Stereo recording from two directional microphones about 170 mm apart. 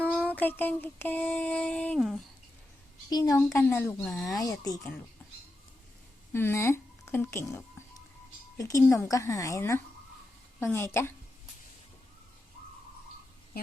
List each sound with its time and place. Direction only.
0.0 s a sound: 10° right (ahead or behind)
0.3 s speech: 10° left (ahead or behind)
3.1 s speech: 20° left (ahead or behind)
6.3 s speech: 15° left (ahead or behind)
8.5 s speech: 20° left (ahead or behind)